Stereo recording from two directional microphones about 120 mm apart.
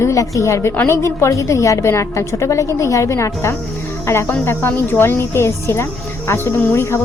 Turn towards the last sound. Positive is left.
turn(degrees=20)  # may be behind; listen again after turning